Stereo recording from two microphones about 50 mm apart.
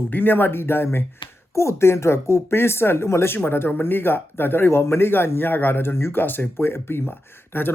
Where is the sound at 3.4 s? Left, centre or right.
Left.